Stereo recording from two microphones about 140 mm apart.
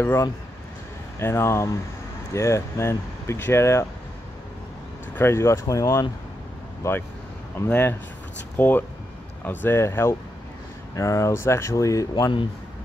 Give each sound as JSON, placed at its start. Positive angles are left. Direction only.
{"t": 0.0, "sound": "speech", "side_deg": 15}
{"t": 5.1, "sound": "speech", "side_deg": 20}